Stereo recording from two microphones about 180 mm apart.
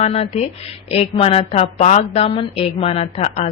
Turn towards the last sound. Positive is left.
turn(degrees=35)  # may be behind; listen again after turning